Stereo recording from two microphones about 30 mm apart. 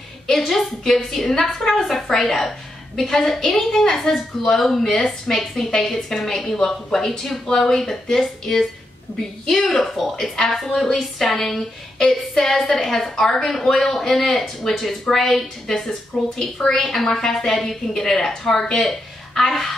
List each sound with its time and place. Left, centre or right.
0.5 s a woman's voice: centre
8.2 s a woman's voice: centre